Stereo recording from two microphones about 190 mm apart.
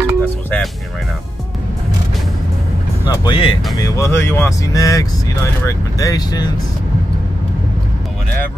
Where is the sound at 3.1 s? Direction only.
25° left (ahead or behind).